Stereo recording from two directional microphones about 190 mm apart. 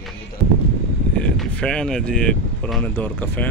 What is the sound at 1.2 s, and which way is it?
Speech, 5° left (ahead or behind).